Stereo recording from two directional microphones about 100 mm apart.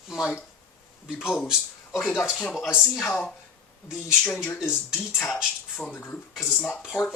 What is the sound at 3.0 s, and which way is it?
Speech, 5° left (ahead or behind).